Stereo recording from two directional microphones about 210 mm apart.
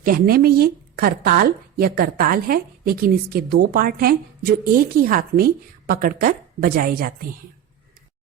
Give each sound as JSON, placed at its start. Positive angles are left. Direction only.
{"t": 0.0, "sound": "speech", "side_deg": -45}